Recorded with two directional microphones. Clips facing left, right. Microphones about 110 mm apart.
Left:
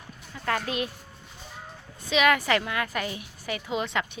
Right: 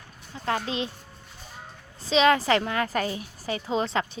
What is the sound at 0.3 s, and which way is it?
Speech, 25° right (ahead or behind).